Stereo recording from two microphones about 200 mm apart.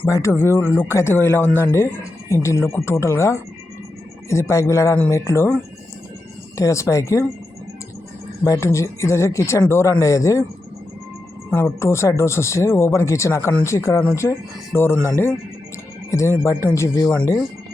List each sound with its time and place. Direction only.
0.0 s speech: 15° left (ahead or behind)
6.6 s speech: 15° left (ahead or behind)
8.4 s speech: 15° left (ahead or behind)
11.5 s speech: 15° left (ahead or behind)
16.0 s speech: 15° left (ahead or behind)